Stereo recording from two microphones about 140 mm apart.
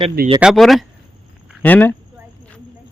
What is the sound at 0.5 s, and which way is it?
Speech, centre (ahead or behind).